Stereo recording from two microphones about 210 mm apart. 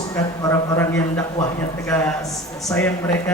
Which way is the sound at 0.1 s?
15° left (ahead or behind).